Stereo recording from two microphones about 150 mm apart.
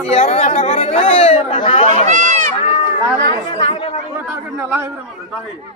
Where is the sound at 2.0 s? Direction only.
55° right (ahead or behind).